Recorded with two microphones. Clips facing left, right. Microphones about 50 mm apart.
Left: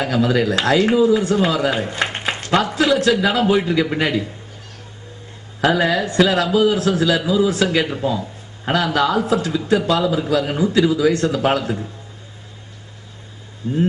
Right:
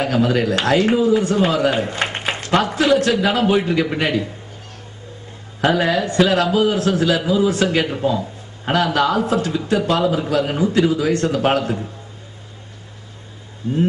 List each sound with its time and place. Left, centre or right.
0.0 s a man's voice: right
5.6 s a man's voice: right